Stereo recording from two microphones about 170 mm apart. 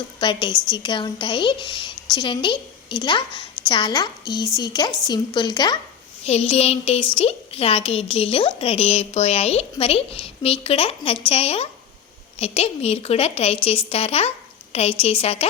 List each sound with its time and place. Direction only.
0.2 s a woman's voice: 30° left (ahead or behind)
6.2 s a woman's voice: 35° left (ahead or behind)